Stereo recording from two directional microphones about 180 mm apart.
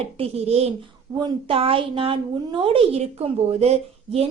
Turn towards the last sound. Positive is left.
turn(degrees=-35)  # may be behind; listen again after turning